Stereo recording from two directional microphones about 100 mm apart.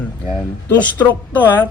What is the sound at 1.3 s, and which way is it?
Speech, 15° left (ahead or behind).